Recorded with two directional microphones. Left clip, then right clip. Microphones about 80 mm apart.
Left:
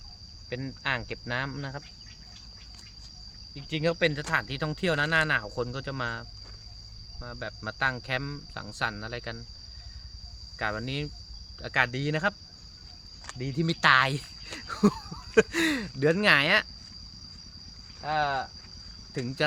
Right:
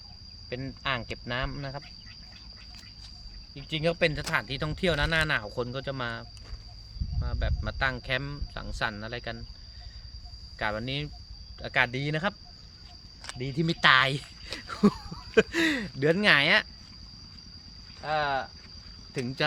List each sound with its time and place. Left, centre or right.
0.5 s cricket: left
3.5 s speech: left
10.6 s cricket: centre
11.6 s speech: centre
13.4 s speech: centre
18.0 s cricket: centre
19.1 s speech: centre